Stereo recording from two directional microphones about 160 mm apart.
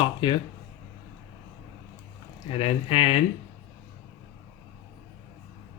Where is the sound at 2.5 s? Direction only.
40° left (ahead or behind).